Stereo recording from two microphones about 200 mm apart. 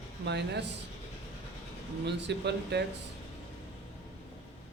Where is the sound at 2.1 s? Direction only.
60° right (ahead or behind).